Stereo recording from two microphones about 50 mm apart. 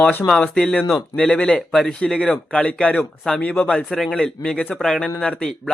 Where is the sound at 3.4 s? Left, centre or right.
Left.